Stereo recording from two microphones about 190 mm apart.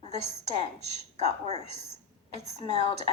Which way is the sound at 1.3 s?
35° right (ahead or behind).